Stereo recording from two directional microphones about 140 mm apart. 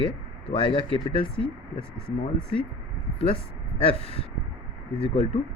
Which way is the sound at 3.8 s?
40° left (ahead or behind).